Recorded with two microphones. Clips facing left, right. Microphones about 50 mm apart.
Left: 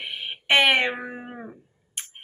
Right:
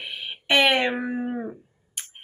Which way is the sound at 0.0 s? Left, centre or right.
Left.